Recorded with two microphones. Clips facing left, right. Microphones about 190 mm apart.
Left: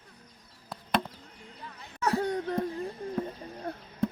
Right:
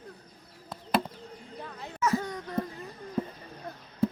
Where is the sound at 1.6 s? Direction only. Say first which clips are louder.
Right 7 dB; 60° right (ahead or behind).